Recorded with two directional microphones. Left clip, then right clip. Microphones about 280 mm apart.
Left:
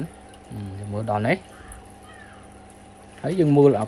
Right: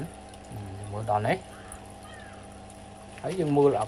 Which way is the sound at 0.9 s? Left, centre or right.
Left.